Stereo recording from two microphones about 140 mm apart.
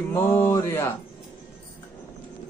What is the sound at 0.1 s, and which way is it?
Speech, 15° left (ahead or behind).